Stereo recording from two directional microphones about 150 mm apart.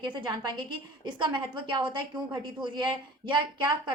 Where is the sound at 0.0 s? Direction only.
30° right (ahead or behind).